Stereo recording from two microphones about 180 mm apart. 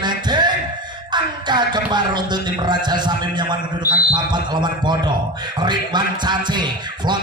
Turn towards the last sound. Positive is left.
turn(degrees=-25)  # may be behind; listen again after turning